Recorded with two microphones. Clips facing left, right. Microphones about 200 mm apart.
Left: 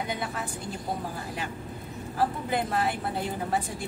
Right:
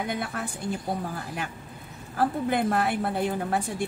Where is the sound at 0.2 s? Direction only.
55° right (ahead or behind).